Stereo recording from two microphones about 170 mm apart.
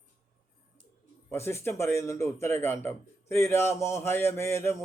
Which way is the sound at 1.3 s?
15° left (ahead or behind).